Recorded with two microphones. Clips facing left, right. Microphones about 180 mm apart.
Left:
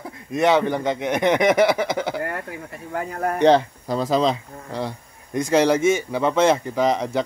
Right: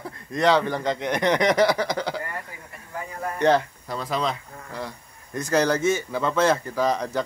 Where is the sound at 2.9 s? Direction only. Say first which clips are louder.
Left 7 dB; 80° left.